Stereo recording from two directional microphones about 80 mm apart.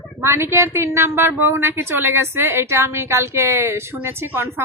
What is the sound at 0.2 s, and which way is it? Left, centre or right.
A woman's voice, right.